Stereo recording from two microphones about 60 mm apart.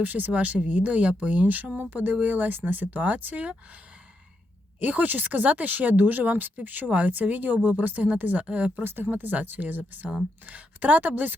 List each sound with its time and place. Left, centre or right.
0.0 s speech: right
4.8 s speech: right
8.8 s speech: right
9.0 s speech: right